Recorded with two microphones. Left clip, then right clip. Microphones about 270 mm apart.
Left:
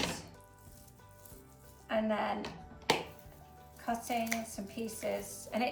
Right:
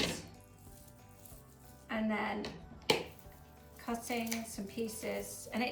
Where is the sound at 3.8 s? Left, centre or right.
Left.